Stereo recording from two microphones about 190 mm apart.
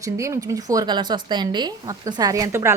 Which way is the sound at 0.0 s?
15° right (ahead or behind).